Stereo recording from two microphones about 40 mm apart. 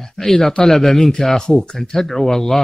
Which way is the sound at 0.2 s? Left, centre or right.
Centre.